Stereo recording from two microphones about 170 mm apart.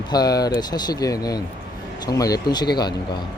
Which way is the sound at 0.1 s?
25° left (ahead or behind).